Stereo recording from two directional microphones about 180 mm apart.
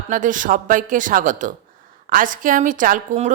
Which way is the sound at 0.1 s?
45° right (ahead or behind).